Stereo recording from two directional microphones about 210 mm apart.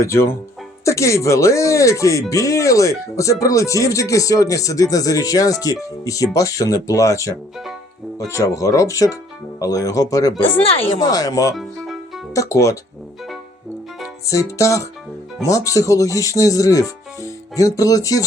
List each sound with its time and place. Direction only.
0.0 s speech: 15° left (ahead or behind)
10.6 s speech: 25° left (ahead or behind)
11.5 s music: centre (ahead or behind)
12.3 s speech: 15° left (ahead or behind)
14.3 s speech: 15° left (ahead or behind)